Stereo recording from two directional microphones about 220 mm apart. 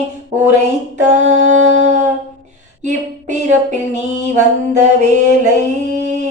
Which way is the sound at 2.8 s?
35° right (ahead or behind).